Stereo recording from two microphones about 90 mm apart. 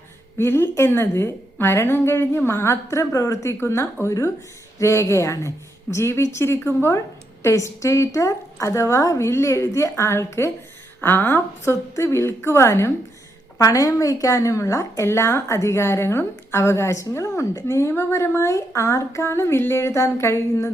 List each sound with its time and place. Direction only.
0.3 s a woman's voice: 30° left (ahead or behind)